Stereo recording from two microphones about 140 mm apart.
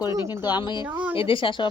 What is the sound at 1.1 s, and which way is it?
Speech, 40° left (ahead or behind).